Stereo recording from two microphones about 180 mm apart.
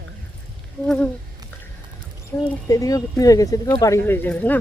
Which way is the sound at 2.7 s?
20° left (ahead or behind).